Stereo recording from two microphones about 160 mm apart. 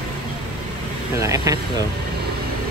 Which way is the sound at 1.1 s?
20° right (ahead or behind).